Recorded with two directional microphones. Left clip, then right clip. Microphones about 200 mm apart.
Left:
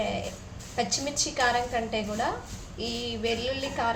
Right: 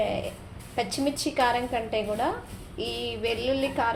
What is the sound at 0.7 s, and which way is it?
A woman's voice, 25° right (ahead or behind).